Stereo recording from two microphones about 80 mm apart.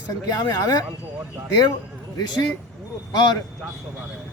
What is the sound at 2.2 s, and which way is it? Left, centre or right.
Speech, left.